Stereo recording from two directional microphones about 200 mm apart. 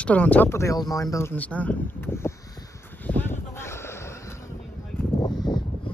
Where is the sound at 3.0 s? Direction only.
10° left (ahead or behind).